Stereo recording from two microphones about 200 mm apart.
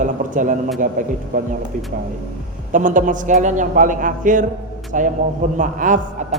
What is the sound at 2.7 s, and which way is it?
A man's voice, 40° right (ahead or behind).